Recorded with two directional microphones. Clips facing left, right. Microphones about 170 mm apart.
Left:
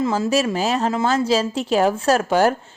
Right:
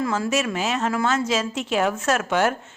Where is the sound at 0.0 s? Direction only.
25° left (ahead or behind).